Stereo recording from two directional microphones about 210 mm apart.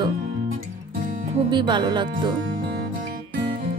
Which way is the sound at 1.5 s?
20° right (ahead or behind).